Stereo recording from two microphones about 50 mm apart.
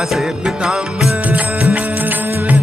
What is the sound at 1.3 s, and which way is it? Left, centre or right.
Music, right.